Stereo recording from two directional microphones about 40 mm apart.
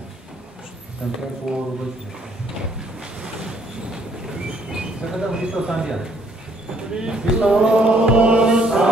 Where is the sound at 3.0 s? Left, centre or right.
Centre.